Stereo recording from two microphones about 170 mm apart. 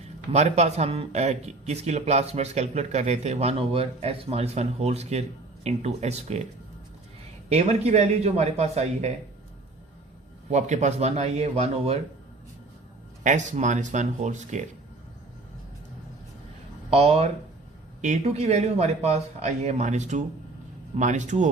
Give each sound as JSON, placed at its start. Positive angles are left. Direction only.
{"t": 0.3, "sound": "speech", "side_deg": -40}
{"t": 7.5, "sound": "speech", "side_deg": -40}
{"t": 10.5, "sound": "speech", "side_deg": -45}
{"t": 13.2, "sound": "speech", "side_deg": -45}
{"t": 16.9, "sound": "speech", "side_deg": -35}